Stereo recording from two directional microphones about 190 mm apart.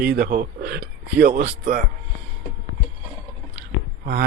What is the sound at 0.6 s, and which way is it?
Speech, 60° right (ahead or behind).